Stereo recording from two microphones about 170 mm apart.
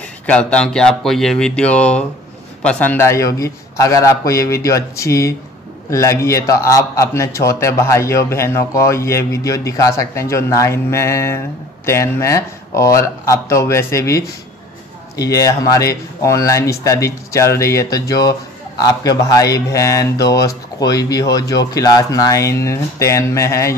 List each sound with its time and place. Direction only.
0.3 s a man's voice: 5° left (ahead or behind)